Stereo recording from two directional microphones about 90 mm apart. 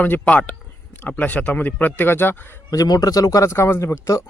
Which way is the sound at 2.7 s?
45° left (ahead or behind).